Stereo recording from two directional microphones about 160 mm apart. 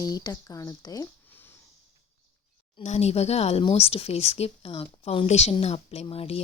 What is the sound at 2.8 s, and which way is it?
Speech, 45° left (ahead or behind).